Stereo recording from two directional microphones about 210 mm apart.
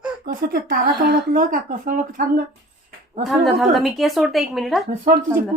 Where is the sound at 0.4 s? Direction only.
50° right (ahead or behind).